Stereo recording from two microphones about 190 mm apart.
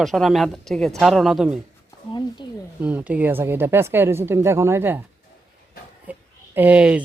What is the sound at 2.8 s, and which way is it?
Speech, 5° right (ahead or behind).